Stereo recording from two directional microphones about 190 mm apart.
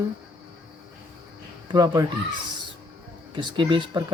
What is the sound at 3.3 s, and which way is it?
Speech, 25° right (ahead or behind).